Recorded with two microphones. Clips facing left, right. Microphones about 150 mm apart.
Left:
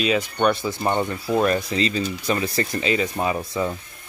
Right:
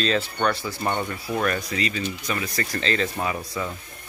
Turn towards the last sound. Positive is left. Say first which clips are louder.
# left 5 dB
turn(degrees=25)  # may be behind; listen again after turning